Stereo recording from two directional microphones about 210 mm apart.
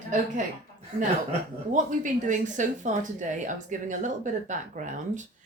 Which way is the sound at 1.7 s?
40° right (ahead or behind).